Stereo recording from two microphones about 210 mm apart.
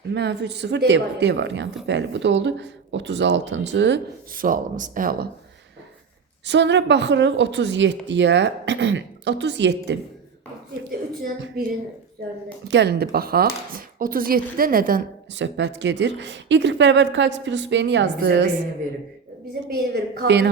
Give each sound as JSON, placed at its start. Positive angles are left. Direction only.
{"t": 0.1, "sound": "a woman's voice", "side_deg": -55}
{"t": 4.4, "sound": "speech", "side_deg": -40}
{"t": 6.4, "sound": "a woman's voice", "side_deg": -55}
{"t": 11.6, "sound": "speech", "side_deg": -45}
{"t": 12.6, "sound": "speech", "side_deg": -55}
{"t": 15.3, "sound": "a woman's voice", "side_deg": -60}
{"t": 19.6, "sound": "speech", "side_deg": -50}